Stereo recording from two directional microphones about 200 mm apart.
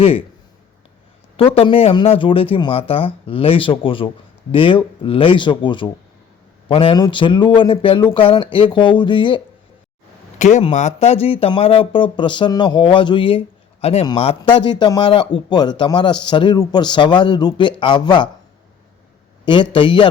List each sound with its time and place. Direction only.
1.4 s speech: 30° left (ahead or behind)
10.3 s speech: 35° left (ahead or behind)
19.5 s speech: 25° left (ahead or behind)